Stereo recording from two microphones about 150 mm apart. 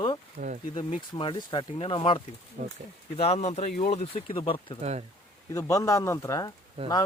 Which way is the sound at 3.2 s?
45° left (ahead or behind).